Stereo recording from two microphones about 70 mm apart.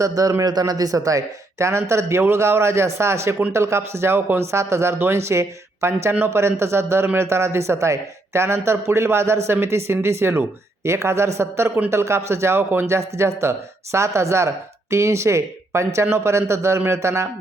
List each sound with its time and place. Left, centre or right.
0.0 s a man's voice: right